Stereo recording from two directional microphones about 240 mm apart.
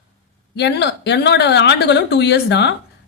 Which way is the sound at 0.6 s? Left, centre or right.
Left.